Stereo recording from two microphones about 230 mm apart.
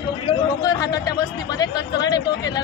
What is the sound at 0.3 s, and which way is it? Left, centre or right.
Speech, centre.